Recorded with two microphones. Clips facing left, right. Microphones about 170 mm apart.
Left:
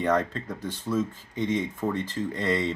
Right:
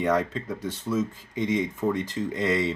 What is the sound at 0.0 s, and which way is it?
Speech, 10° right (ahead or behind).